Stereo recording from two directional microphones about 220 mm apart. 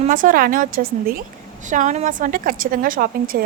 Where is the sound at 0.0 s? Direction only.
35° right (ahead or behind).